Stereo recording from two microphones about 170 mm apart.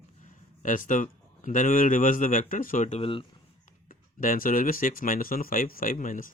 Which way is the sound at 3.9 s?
55° left (ahead or behind).